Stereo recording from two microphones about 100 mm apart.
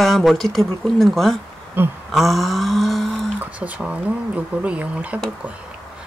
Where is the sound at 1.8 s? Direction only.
20° right (ahead or behind).